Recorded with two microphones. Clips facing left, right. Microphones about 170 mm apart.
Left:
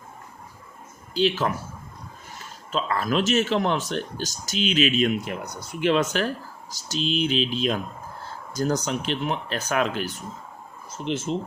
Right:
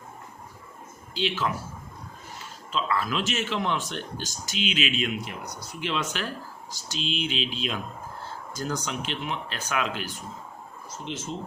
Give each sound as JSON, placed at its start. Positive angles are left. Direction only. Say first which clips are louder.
{"t": 1.1, "sound": "speech", "louder": "left 6 dB", "side_deg": 40}
{"t": 2.7, "sound": "speech", "louder": "left 4 dB", "side_deg": 45}